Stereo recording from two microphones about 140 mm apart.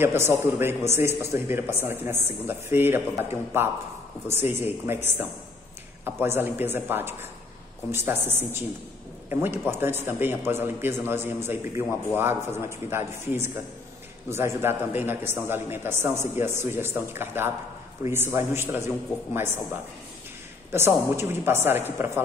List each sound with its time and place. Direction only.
0.0 s a man's voice: 15° right (ahead or behind)